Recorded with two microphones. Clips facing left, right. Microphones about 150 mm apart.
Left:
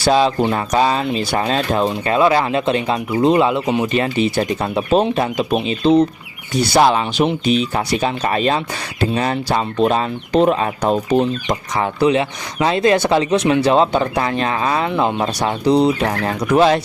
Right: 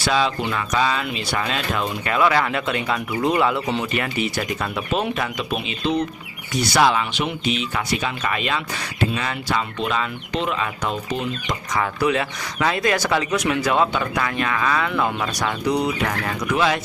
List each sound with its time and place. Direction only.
0.0 s speech: 35° left (ahead or behind)